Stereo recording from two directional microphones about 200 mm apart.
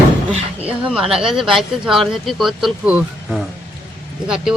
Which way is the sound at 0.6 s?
5° right (ahead or behind).